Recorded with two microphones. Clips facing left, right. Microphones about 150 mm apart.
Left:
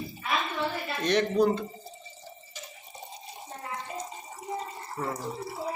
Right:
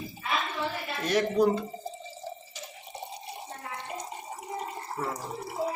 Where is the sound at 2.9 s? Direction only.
65° right (ahead or behind).